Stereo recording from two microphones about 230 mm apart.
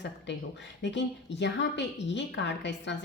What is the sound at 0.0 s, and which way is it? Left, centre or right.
A woman's voice, left.